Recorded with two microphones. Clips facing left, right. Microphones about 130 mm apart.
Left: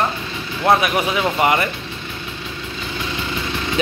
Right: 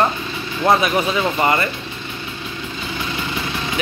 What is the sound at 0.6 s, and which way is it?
Speech, 10° left (ahead or behind).